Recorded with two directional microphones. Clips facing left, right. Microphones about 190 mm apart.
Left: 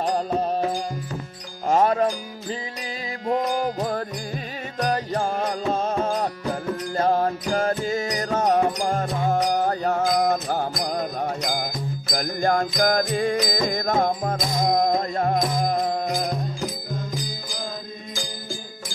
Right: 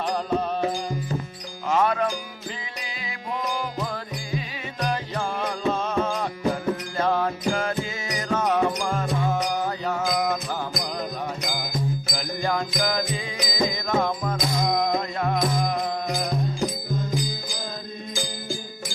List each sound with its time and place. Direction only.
0.0 s music: 40° left (ahead or behind)
1.7 s music: 40° left (ahead or behind)